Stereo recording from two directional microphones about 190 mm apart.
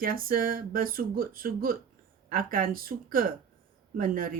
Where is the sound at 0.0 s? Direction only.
50° right (ahead or behind).